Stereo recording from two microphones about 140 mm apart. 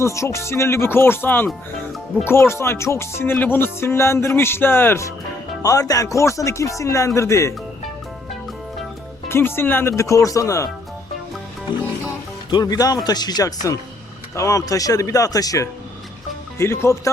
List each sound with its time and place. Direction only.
0.0 s speech: 20° left (ahead or behind)
2.2 s music: 20° left (ahead or behind)
5.6 s speech: 25° left (ahead or behind)
9.3 s speech: 15° left (ahead or behind)
12.5 s speech: 30° left (ahead or behind)